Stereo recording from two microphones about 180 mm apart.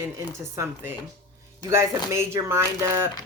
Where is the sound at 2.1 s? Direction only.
15° right (ahead or behind).